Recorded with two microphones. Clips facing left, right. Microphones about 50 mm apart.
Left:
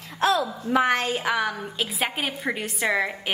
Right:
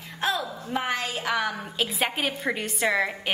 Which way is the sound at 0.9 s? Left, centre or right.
Left.